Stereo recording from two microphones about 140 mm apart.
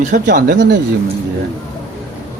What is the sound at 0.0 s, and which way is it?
Speech, 70° right (ahead or behind).